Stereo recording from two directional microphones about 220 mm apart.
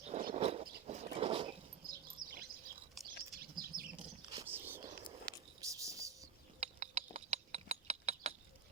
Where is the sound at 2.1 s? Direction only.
40° right (ahead or behind).